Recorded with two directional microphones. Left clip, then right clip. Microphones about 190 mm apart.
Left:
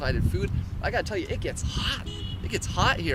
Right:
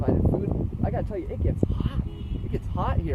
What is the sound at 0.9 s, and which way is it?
Speech, 20° left (ahead or behind).